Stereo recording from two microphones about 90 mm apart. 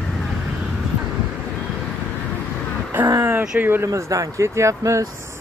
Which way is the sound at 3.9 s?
40° right (ahead or behind).